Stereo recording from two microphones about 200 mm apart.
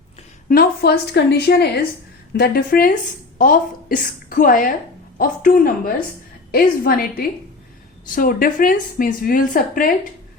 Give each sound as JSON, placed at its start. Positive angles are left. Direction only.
{"t": 0.4, "sound": "a woman's voice", "side_deg": 50}